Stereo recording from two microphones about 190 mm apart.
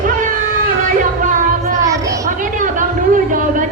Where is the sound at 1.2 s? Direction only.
45° right (ahead or behind).